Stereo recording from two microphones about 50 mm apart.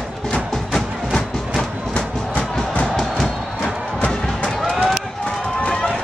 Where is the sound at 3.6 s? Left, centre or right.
Left.